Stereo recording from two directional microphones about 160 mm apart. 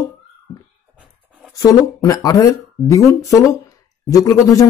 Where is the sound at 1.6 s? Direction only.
20° left (ahead or behind).